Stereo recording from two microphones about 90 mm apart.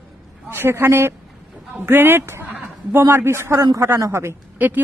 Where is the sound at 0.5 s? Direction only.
25° right (ahead or behind).